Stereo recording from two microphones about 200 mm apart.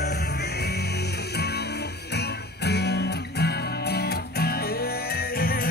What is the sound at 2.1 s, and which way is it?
Music, 55° left (ahead or behind).